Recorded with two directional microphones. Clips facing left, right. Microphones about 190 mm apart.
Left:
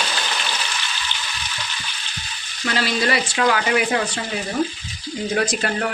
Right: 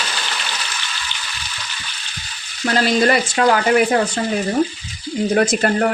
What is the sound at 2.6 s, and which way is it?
Speech, 45° right (ahead or behind).